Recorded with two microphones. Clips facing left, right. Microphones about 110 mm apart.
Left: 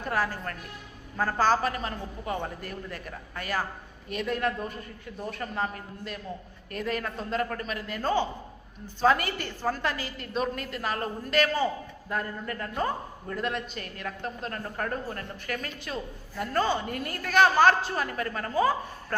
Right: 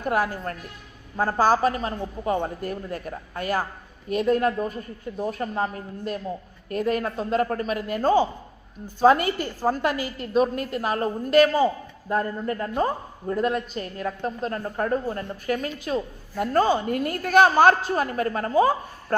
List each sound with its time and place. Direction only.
1.1 s a woman's voice: 35° right (ahead or behind)
15.5 s a woman's voice: 40° right (ahead or behind)